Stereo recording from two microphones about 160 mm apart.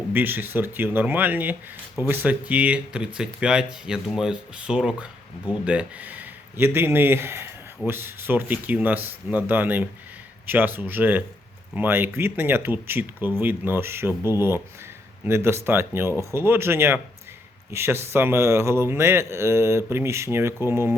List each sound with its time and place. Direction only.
0.1 s speech: 10° right (ahead or behind)